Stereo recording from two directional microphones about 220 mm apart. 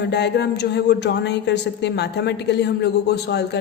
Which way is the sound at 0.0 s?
50° left (ahead or behind).